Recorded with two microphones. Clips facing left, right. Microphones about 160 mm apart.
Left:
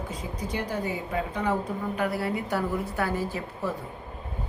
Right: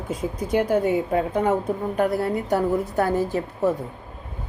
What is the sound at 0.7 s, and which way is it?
A woman's voice, 55° right (ahead or behind).